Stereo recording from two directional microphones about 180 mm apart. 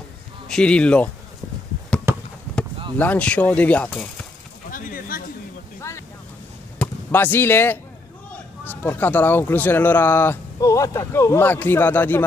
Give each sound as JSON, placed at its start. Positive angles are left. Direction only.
{"t": 0.5, "sound": "speech", "side_deg": 5}
{"t": 2.1, "sound": "a sound", "side_deg": -15}
{"t": 3.0, "sound": "speech", "side_deg": 5}
{"t": 4.6, "sound": "a sound", "side_deg": 50}
{"t": 5.8, "sound": "vehicle", "side_deg": 15}
{"t": 6.8, "sound": "speech", "side_deg": 10}